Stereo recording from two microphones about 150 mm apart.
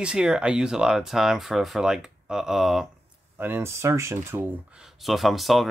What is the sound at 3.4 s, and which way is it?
Speech, 15° right (ahead or behind).